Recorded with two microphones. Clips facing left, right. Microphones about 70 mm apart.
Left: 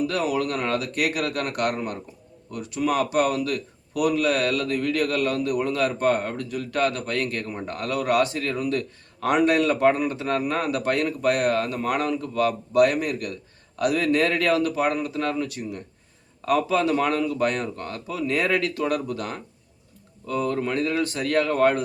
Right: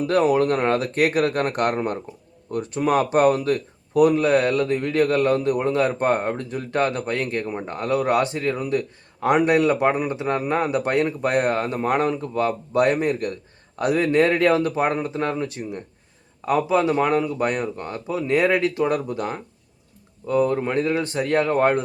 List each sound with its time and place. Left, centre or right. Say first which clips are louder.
0.1 s speech: right 6 dB; right